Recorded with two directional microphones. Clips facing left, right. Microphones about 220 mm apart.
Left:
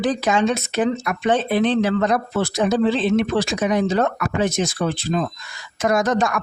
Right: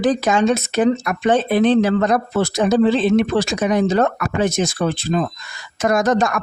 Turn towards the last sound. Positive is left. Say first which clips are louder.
# right 2 dB
turn(degrees=-45)  # may be behind; listen again after turning